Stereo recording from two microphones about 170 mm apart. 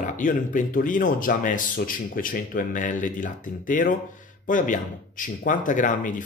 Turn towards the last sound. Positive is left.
turn(degrees=50)  # may be behind; listen again after turning